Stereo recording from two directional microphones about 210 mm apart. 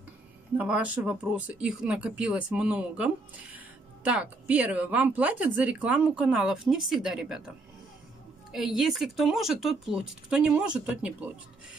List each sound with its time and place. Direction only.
0.6 s a woman's voice: 5° right (ahead or behind)